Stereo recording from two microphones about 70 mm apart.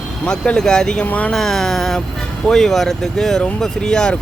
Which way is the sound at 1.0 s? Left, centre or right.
Left.